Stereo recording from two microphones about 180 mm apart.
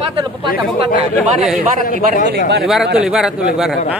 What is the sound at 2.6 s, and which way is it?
A man's voice, centre (ahead or behind).